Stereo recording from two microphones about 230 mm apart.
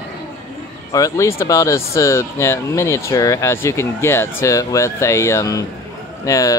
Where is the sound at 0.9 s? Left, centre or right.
Centre.